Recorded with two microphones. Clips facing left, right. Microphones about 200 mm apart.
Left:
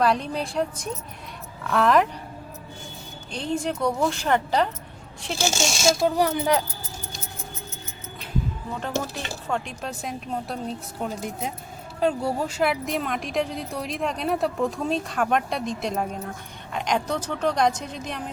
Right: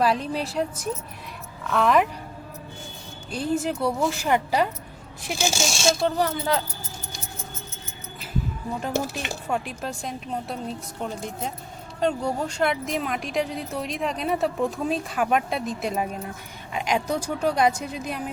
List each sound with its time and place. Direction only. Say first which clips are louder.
0.0 s speech: even; 5° right (ahead or behind)
3.3 s speech: right 2 dB; 5° right (ahead or behind)
5.8 s speech: left 2 dB; 10° left (ahead or behind)
8.8 s speech: right 1 dB; 10° right (ahead or behind)
9.6 s speech: right 1 dB; centre (ahead or behind)